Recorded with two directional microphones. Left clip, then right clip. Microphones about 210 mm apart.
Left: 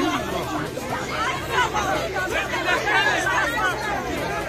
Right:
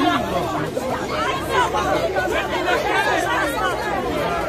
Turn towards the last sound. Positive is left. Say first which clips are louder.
# right 1 dB
turn(degrees=-45)  # may be behind; listen again after turning